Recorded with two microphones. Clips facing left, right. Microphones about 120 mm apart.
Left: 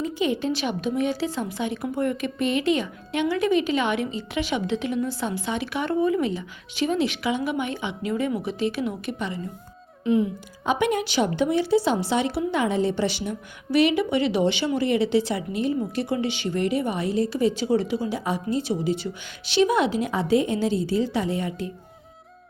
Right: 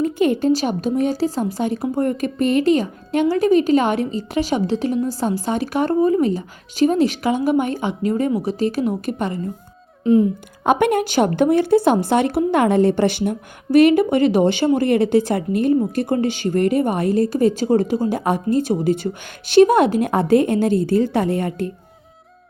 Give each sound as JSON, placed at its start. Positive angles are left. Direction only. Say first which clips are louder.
{"t": 0.0, "sound": "a woman's voice", "louder": "right 7 dB", "side_deg": -50}
{"t": 10.7, "sound": "a woman's voice", "louder": "right 6 dB", "side_deg": -55}